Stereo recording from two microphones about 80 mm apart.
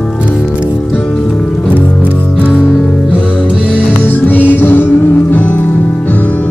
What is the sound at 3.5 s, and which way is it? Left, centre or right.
Music, centre.